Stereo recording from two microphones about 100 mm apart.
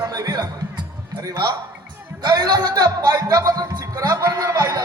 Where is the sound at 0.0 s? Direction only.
40° right (ahead or behind).